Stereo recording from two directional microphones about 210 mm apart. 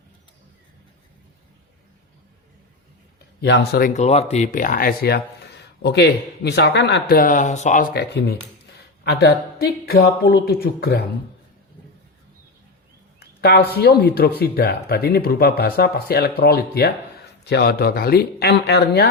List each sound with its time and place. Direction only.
3.4 s speech: 50° left (ahead or behind); by 7.9 s 35° left (ahead or behind)
7.9 s speech: 50° left (ahead or behind)
13.1 s speech: 50° left (ahead or behind)